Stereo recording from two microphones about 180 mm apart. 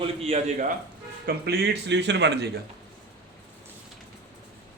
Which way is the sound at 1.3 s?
65° right (ahead or behind).